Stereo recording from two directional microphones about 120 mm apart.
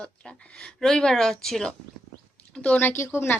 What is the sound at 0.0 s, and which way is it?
A woman's voice, 10° left (ahead or behind).